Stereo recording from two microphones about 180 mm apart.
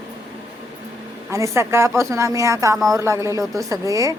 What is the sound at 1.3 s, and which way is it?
Speech, 15° right (ahead or behind).